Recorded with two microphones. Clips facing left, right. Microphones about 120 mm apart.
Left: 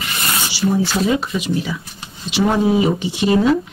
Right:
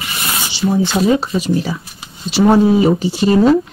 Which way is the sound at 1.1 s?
35° right (ahead or behind).